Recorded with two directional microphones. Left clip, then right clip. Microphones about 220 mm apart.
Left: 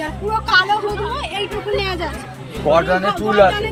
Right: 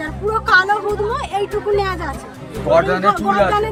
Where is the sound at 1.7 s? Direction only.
5° right (ahead or behind).